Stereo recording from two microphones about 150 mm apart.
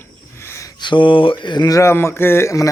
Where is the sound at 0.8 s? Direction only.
30° left (ahead or behind).